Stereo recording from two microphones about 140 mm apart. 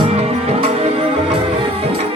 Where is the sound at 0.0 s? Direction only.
45° right (ahead or behind).